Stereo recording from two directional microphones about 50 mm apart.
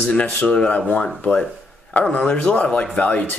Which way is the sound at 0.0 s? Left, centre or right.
Left.